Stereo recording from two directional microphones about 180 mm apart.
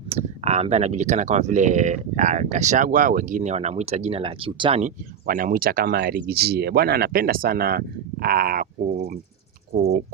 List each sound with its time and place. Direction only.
0.1 s speech: 35° right (ahead or behind)
4.8 s speech: 50° right (ahead or behind)